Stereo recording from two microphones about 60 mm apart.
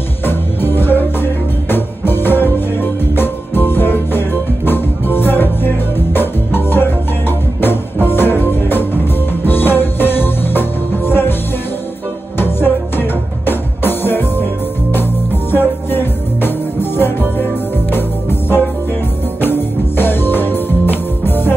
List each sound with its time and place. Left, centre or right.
0.2 s music: left
12.4 s music: left